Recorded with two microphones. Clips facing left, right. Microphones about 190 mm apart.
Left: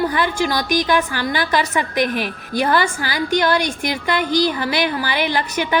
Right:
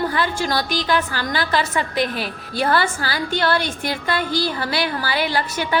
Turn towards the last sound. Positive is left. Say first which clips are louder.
# left 2 dB
turn(degrees=20)  # may be behind; listen again after turning